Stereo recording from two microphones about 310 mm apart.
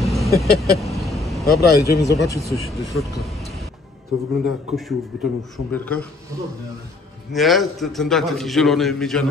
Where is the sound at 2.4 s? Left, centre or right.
Centre.